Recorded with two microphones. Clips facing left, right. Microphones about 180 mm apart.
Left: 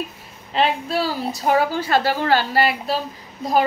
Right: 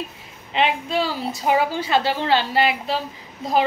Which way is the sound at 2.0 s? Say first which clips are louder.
Left 2 dB; 20° right (ahead or behind).